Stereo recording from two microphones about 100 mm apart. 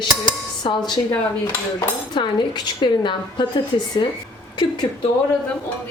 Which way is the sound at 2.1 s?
50° left (ahead or behind).